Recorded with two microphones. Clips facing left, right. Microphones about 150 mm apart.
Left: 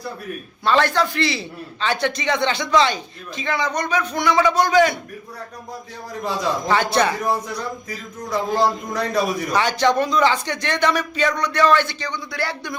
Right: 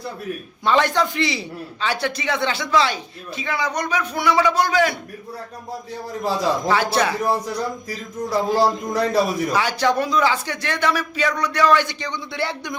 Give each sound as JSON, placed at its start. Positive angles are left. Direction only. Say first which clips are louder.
{"t": 0.6, "sound": "a man's voice", "louder": "even", "side_deg": -15}
{"t": 6.4, "sound": "speech", "louder": "even", "side_deg": -5}
{"t": 7.9, "sound": "a man's voice", "louder": "right 2 dB", "side_deg": -35}
{"t": 9.5, "sound": "a man's voice", "louder": "left 1 dB", "side_deg": -5}